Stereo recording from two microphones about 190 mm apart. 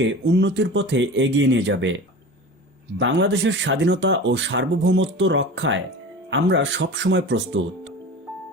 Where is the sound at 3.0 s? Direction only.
65° right (ahead or behind).